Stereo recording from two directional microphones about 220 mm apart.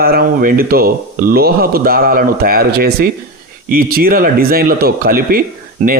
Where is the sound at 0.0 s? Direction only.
40° right (ahead or behind).